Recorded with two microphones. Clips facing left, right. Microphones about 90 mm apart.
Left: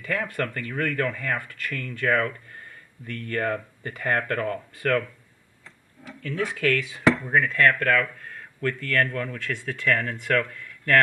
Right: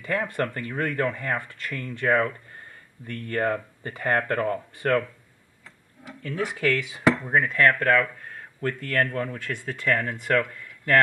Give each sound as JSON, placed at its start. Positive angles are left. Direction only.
{"t": 0.0, "sound": "speech", "side_deg": -25}
{"t": 6.4, "sound": "speech", "side_deg": -20}